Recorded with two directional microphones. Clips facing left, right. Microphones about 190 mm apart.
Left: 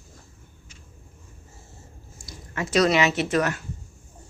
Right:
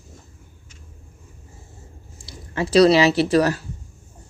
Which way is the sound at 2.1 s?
30° right (ahead or behind).